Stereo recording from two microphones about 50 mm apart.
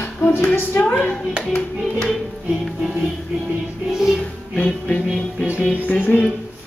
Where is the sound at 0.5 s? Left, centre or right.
Left.